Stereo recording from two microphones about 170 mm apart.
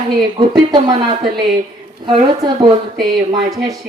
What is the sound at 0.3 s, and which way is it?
Speech, 25° right (ahead or behind).